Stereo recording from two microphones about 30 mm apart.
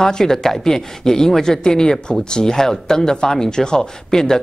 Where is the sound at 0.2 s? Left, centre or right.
Centre.